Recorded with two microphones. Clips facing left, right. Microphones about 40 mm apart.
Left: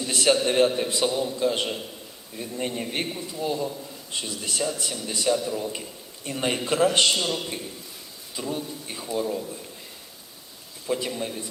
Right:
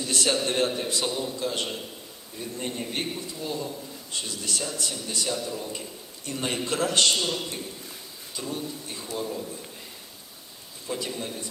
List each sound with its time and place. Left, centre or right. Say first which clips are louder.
0.1 s a sound: left 5 dB; left
0.4 s a man's voice: left 5 dB; left
10.8 s a man's voice: left 4 dB; centre